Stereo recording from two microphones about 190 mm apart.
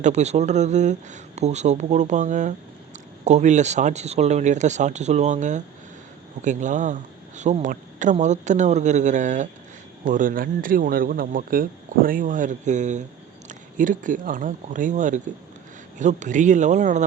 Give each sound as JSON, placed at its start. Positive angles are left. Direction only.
{"t": 0.0, "sound": "speech", "side_deg": -35}